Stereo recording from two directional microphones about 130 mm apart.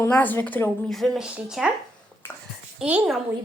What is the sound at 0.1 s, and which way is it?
Speech, 15° left (ahead or behind).